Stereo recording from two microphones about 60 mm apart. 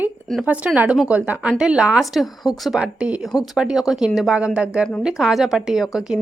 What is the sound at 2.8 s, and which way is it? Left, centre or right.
A woman's voice, centre.